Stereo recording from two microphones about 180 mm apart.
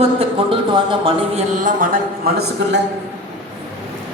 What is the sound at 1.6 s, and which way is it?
A man's voice, 50° right (ahead or behind).